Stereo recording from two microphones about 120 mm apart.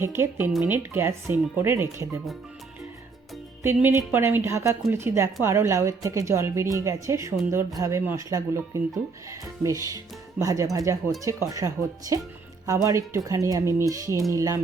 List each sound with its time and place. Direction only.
0.0 s speech: 20° right (ahead or behind)
3.8 s speech: 20° right (ahead or behind)